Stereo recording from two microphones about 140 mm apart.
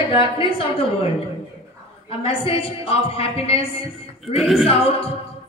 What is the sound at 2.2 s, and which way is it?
A woman's voice, 40° left (ahead or behind).